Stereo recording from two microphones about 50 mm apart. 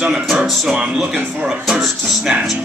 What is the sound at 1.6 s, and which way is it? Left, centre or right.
Music, centre.